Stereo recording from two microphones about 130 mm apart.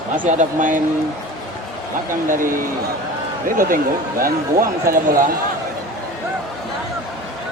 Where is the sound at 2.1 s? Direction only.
90° right.